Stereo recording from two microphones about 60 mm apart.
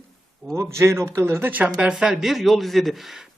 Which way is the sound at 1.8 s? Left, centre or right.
Centre.